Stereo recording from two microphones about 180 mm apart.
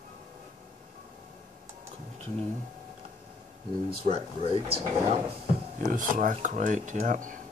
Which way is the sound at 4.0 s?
35° right (ahead or behind).